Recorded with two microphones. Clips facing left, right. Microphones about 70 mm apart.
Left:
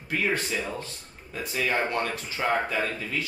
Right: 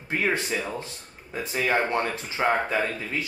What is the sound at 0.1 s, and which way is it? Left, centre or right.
Speech, right.